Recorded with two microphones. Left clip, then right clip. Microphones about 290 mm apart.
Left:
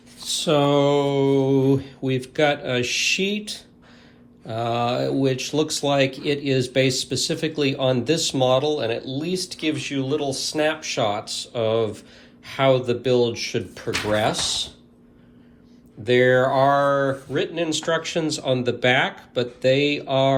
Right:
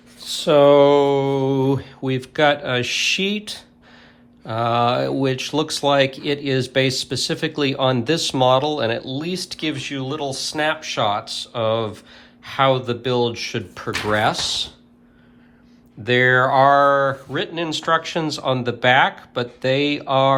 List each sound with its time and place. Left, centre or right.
0.3 s mantra: right
2.0 s speech: centre
16.0 s speech: right